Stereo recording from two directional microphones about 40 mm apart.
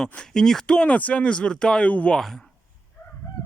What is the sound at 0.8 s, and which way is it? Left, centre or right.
Speech, left.